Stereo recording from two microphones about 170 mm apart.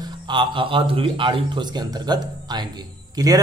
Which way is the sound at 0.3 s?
30° right (ahead or behind).